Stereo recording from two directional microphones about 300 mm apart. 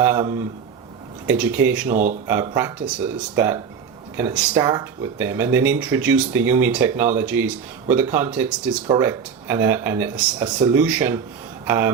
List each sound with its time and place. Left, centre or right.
0.0 s speech: centre
1.9 s speech: right
2.2 s speech: centre